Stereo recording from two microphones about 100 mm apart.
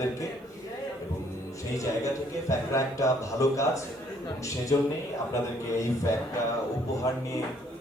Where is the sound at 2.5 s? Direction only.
30° left (ahead or behind).